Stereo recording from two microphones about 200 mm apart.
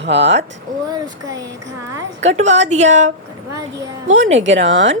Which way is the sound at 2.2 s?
35° right (ahead or behind).